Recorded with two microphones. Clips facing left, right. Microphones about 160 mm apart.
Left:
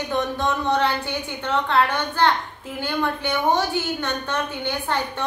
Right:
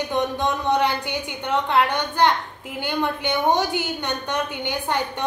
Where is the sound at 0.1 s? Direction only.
15° right (ahead or behind).